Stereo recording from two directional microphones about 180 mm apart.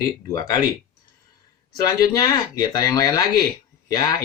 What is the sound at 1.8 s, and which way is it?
Speech, 20° left (ahead or behind).